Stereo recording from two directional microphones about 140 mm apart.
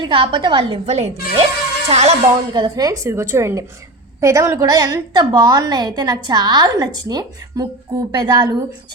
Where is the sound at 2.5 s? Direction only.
30° right (ahead or behind).